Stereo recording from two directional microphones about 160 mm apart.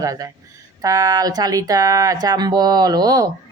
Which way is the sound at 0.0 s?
20° right (ahead or behind).